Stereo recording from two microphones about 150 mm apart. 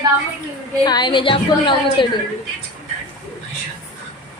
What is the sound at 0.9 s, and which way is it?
A woman's voice, 30° left (ahead or behind).